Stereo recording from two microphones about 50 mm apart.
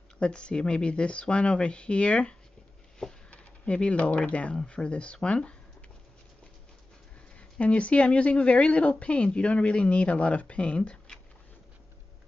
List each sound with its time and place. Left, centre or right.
0.2 s a woman's voice: centre
7.3 s a woman's voice: left